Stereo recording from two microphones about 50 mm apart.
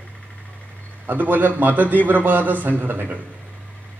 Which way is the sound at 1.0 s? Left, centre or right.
Right.